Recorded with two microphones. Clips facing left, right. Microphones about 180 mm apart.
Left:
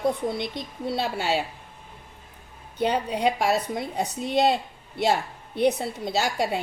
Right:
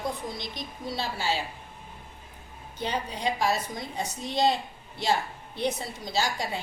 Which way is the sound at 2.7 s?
60° left (ahead or behind).